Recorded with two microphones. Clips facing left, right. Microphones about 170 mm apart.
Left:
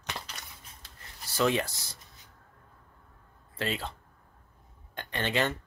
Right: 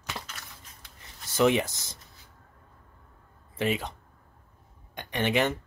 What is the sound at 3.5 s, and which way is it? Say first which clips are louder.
Speech: right 5 dB; 15° right (ahead or behind).